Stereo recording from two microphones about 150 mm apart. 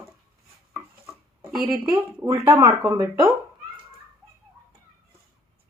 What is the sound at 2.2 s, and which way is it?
Speech, 20° right (ahead or behind).